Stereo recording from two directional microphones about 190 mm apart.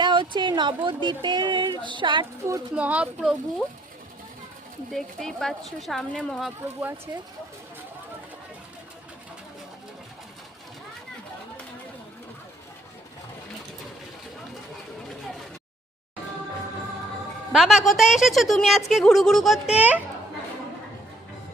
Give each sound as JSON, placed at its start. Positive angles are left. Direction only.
{"t": 0.0, "sound": "speech", "side_deg": -25}
{"t": 4.9, "sound": "a woman's voice", "side_deg": 0}
{"t": 17.5, "sound": "a woman's voice", "side_deg": -5}